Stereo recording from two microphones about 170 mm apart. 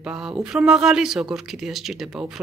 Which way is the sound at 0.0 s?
5° right (ahead or behind).